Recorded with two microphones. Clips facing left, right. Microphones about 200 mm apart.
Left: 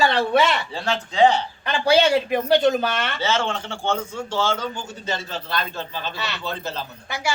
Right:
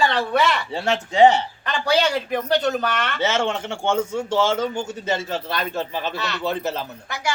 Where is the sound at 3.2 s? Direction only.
20° right (ahead or behind).